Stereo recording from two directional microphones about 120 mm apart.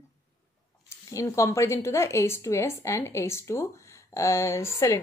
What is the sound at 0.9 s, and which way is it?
A woman's voice, 25° left (ahead or behind).